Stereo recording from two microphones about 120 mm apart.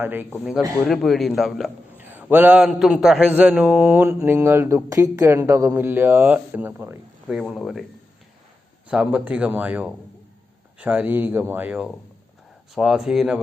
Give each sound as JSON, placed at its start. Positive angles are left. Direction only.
{"t": 0.0, "sound": "a man's voice", "side_deg": -15}
{"t": 0.9, "sound": "speech", "side_deg": 0}
{"t": 2.0, "sound": "a man's voice", "side_deg": -15}
{"t": 7.3, "sound": "speech", "side_deg": -5}
{"t": 8.9, "sound": "a man's voice", "side_deg": -10}